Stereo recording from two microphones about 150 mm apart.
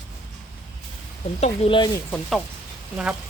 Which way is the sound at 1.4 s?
40° left (ahead or behind).